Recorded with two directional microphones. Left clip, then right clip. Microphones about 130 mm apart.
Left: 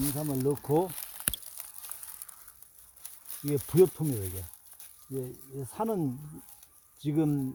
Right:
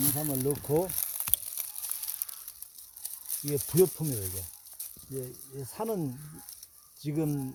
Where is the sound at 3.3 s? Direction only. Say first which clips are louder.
Left 1 dB; 20° right (ahead or behind).